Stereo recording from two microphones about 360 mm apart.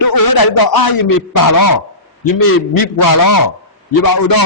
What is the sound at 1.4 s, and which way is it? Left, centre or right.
A man's voice, left.